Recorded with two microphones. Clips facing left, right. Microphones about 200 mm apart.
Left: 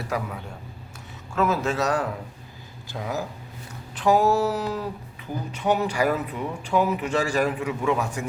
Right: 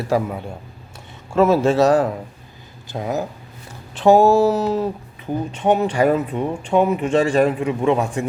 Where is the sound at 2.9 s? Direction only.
20° right (ahead or behind).